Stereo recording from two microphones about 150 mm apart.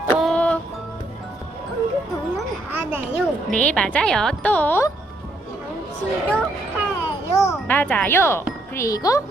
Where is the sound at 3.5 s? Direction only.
10° left (ahead or behind).